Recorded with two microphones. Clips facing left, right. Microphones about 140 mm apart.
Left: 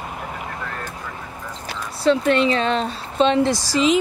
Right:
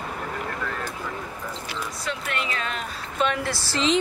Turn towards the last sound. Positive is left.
turn(degrees=10)  # may be behind; listen again after turning